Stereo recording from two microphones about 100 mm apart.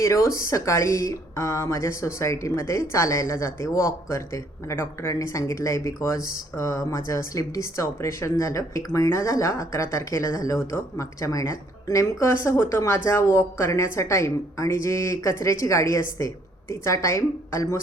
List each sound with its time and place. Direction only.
0.0 s speech: 30° left (ahead or behind)